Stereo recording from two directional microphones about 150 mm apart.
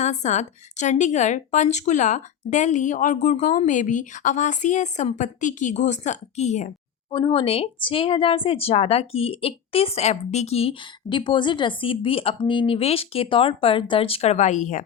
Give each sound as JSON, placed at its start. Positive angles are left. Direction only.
{"t": 0.0, "sound": "a woman's voice", "side_deg": 50}
{"t": 7.1, "sound": "a woman's voice", "side_deg": 35}